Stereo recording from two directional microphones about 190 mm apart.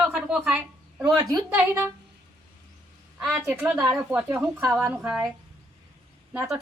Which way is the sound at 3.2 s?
10° right (ahead or behind).